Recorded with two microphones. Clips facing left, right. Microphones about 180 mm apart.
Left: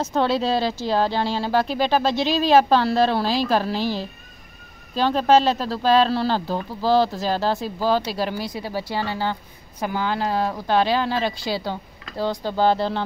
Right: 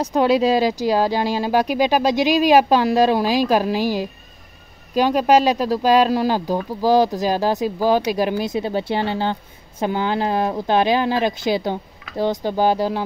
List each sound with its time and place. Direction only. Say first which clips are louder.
0.0 s speech: right 5 dB; 15° right (ahead or behind)